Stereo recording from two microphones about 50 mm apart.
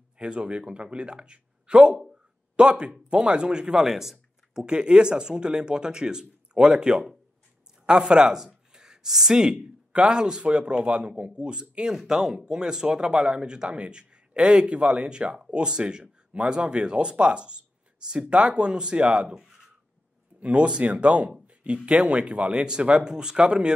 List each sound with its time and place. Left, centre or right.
0.2 s speech: right; by 4.6 s centre
4.6 s speech: centre
19.2 s a sound: centre
20.3 s speech: right